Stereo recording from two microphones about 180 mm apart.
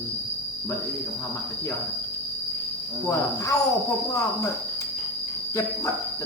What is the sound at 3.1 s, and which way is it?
Cricket, 15° left (ahead or behind).